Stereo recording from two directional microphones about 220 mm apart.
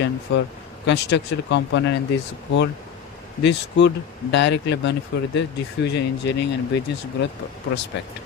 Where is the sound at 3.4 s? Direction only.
50° left (ahead or behind).